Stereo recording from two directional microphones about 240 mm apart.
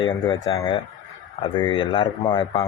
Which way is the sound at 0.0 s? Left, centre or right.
Centre.